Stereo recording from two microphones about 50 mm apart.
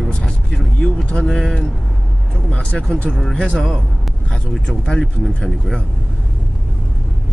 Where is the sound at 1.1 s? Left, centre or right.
Centre.